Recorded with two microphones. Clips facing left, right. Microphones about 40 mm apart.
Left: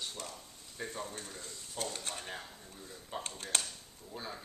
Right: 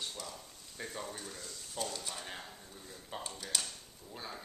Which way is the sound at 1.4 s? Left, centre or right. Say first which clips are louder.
Even; left.